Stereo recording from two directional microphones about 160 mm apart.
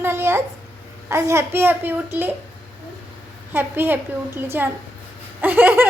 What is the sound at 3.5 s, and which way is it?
A child's voice, 15° right (ahead or behind).